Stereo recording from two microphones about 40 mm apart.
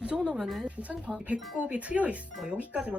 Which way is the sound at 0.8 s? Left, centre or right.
Right.